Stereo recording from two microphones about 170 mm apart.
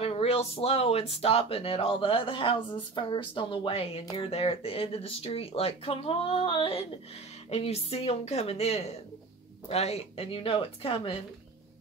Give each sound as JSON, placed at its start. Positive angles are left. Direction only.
{"t": 0.0, "sound": "speech", "side_deg": 35}